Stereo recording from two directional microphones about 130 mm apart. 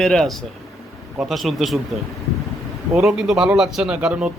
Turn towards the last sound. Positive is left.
turn(degrees=-10)  # may be behind; listen again after turning